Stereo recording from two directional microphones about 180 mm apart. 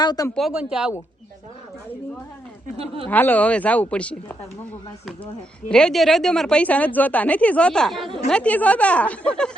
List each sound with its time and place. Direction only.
0.0 s speech: 25° left (ahead or behind)
0.3 s speech: 5° right (ahead or behind)
2.7 s speech: 30° right (ahead or behind)
3.1 s speech: 10° left (ahead or behind)